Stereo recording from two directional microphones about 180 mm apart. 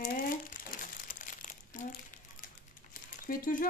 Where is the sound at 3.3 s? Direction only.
50° left (ahead or behind).